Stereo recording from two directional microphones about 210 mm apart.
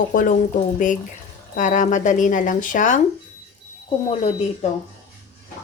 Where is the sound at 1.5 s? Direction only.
35° left (ahead or behind).